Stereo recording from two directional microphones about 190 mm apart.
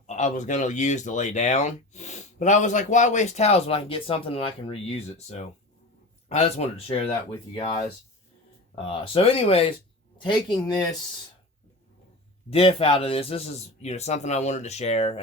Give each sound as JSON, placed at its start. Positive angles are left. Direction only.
{"t": 0.1, "sound": "a man's voice", "side_deg": 40}
{"t": 9.0, "sound": "a man's voice", "side_deg": 30}
{"t": 12.5, "sound": "speech", "side_deg": 30}